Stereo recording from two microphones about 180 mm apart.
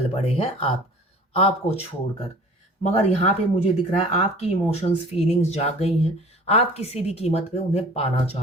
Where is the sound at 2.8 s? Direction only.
35° left (ahead or behind).